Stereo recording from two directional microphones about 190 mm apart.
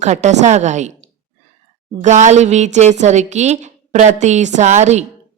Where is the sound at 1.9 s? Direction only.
40° right (ahead or behind).